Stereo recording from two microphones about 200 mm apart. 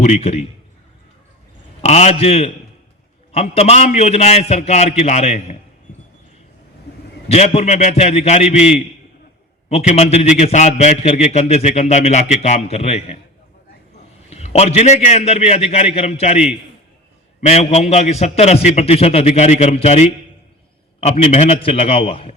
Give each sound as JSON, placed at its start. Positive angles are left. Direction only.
{"t": 0.0, "sound": "a man's voice", "side_deg": 30}
{"t": 1.8, "sound": "a man's voice", "side_deg": 35}
{"t": 7.3, "sound": "a man's voice", "side_deg": 35}
{"t": 9.6, "sound": "a man's voice", "side_deg": 30}
{"t": 14.3, "sound": "a man's voice", "side_deg": 30}
{"t": 17.4, "sound": "a man's voice", "side_deg": 30}